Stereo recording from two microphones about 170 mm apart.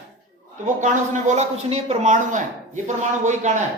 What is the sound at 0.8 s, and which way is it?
A man's voice, 45° right (ahead or behind).